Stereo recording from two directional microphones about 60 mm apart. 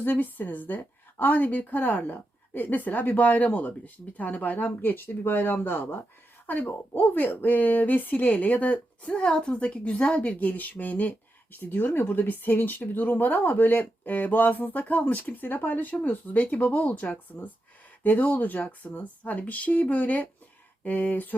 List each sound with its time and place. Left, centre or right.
0.0 s a woman's voice: left